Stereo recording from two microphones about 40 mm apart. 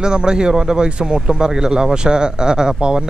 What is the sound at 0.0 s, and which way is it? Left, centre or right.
Speech, centre.